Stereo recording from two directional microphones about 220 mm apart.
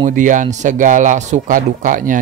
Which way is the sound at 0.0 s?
35° right (ahead or behind).